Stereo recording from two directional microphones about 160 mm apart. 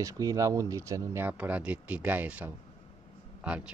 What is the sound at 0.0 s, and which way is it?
Speech, 20° right (ahead or behind).